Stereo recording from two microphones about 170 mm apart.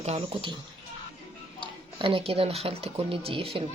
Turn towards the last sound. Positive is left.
turn(degrees=-30)  # may be behind; listen again after turning